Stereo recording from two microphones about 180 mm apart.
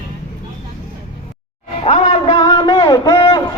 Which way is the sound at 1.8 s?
35° left (ahead or behind).